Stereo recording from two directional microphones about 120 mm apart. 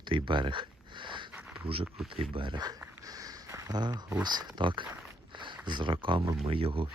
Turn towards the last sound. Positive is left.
turn(degrees=-50)  # may be behind; listen again after turning